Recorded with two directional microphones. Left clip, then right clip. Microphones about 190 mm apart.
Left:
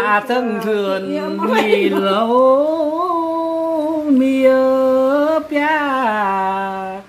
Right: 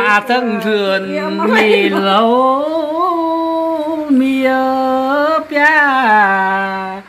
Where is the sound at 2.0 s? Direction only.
35° right (ahead or behind).